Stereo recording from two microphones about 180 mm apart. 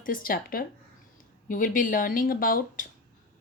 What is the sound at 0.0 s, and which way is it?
Speech, 50° left (ahead or behind).